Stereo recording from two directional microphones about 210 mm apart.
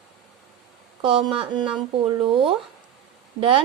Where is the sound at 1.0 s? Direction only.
25° right (ahead or behind).